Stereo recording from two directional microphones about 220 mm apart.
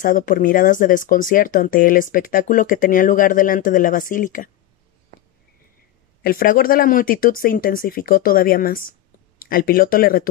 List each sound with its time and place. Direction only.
0.0 s speech: 40° left (ahead or behind)
6.2 s speech: 40° left (ahead or behind)